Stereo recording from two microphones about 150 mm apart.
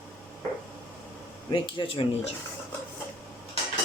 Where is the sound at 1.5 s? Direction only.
35° left (ahead or behind).